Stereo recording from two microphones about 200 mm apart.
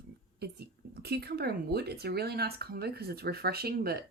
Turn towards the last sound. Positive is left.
turn(degrees=-50)  # may be behind; listen again after turning